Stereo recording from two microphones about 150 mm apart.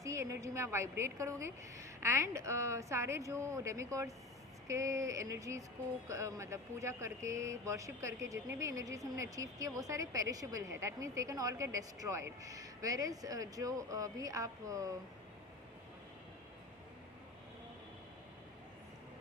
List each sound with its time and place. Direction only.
0.0 s speech: 20° right (ahead or behind)